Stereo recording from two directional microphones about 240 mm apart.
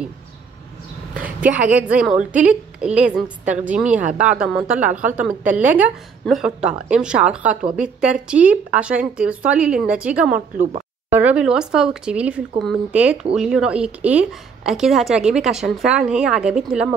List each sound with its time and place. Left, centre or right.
1.4 s speech: centre
10.3 s a woman's voice: right
11.1 s speech: centre